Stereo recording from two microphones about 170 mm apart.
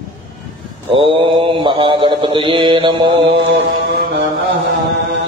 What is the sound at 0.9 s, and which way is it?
A man's voice, 30° right (ahead or behind).